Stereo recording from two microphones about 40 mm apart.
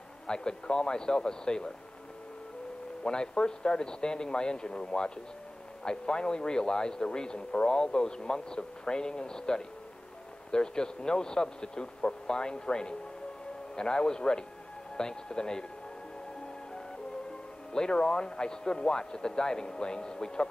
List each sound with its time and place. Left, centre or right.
0.3 s speech: left
3.0 s speech: centre
17.7 s speech: centre